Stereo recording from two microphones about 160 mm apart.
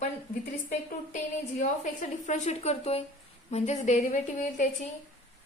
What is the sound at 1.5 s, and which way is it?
A woman's voice, 50° left (ahead or behind).